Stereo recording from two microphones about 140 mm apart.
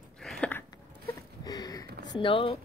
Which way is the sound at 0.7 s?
25° left (ahead or behind).